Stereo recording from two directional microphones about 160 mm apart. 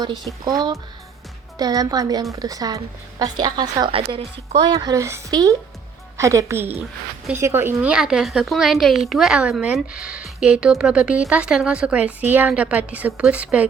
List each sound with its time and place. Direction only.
0.0 s a woman's voice: 25° right (ahead or behind); by 13.7 s 10° right (ahead or behind)